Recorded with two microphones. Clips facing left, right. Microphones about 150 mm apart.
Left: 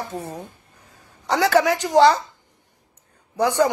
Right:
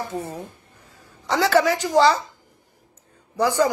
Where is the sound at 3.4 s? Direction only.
20° left (ahead or behind).